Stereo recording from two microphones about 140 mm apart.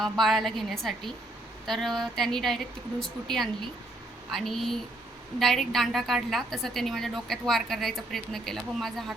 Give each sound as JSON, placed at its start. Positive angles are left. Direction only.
{"t": 0.0, "sound": "a woman's voice", "side_deg": 0}